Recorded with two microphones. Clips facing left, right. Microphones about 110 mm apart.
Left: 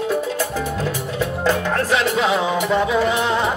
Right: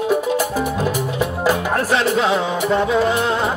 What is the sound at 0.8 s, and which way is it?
Music, 15° right (ahead or behind).